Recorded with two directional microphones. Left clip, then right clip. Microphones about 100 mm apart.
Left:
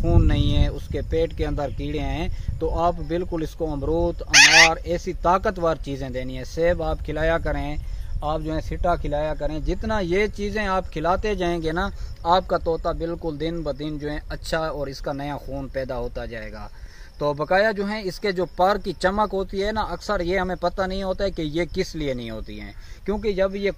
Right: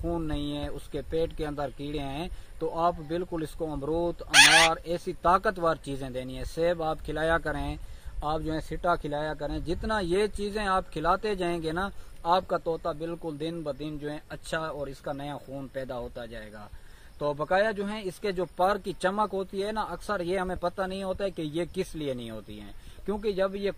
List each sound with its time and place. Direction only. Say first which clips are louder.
0.0 s speech: left 7 dB; 10° left (ahead or behind)
4.3 s speech: left 5 dB; 20° right (ahead or behind)
4.8 s speech: left 4 dB; 5° right (ahead or behind); by 7.8 s 40° right (ahead or behind)
8.2 s speech: left 4 dB; 60° right (ahead or behind); by 14.4 s 35° left (ahead or behind)
14.5 s speech: left 7 dB; 50° left (ahead or behind)
15.8 s speech: left 7 dB; 90° left
17.2 s speech: left 6 dB; 60° left (ahead or behind); by 23.7 s 5° left (ahead or behind)